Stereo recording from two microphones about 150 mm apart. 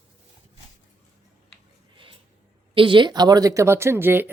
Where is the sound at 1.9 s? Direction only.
35° right (ahead or behind).